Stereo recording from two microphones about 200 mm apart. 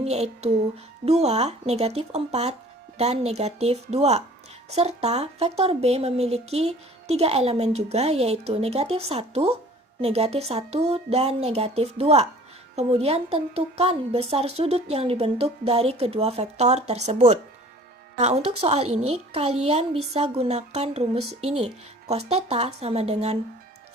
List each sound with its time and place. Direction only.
0.0 s speech: 30° right (ahead or behind)